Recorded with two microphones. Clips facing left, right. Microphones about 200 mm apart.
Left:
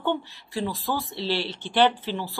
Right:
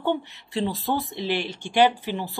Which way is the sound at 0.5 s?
25° right (ahead or behind).